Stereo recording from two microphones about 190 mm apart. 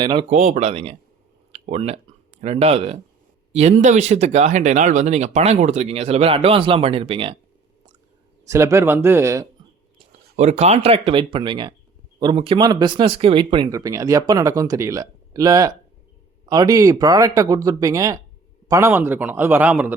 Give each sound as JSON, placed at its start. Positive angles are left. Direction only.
{"t": 0.0, "sound": "speech", "side_deg": -25}
{"t": 0.3, "sound": "speech", "side_deg": -40}
{"t": 8.4, "sound": "a man's voice", "side_deg": -15}
{"t": 10.3, "sound": "a man's voice", "side_deg": -35}